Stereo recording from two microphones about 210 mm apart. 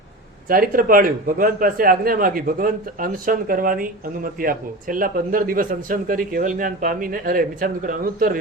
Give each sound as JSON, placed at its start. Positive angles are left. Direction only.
{"t": 0.4, "sound": "a man's voice", "side_deg": -40}